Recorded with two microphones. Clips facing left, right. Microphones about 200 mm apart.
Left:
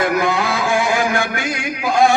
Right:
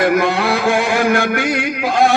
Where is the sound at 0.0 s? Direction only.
65° right (ahead or behind).